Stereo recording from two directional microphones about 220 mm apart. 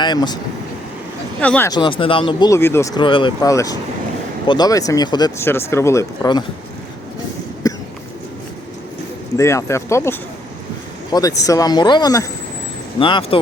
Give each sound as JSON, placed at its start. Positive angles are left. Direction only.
{"t": 0.0, "sound": "speech", "side_deg": 20}
{"t": 1.4, "sound": "speech", "side_deg": 5}
{"t": 1.7, "sound": "speech", "side_deg": 20}
{"t": 7.6, "sound": "cough", "side_deg": 15}
{"t": 9.4, "sound": "speech", "side_deg": 15}